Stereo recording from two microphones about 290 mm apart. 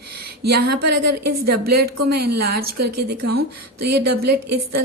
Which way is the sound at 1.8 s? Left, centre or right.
Right.